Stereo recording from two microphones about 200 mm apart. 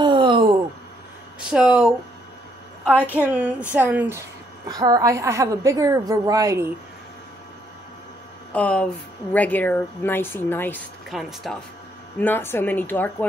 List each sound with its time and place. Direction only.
0.0 s a sound: 25° right (ahead or behind)
1.5 s speech: 5° right (ahead or behind)
2.9 s a woman's voice: 10° left (ahead or behind)
3.2 s a woman's voice: 5° right (ahead or behind)
8.5 s a woman's voice: 5° left (ahead or behind)
11.1 s speech: centre (ahead or behind)
12.2 s a woman's voice: 10° left (ahead or behind)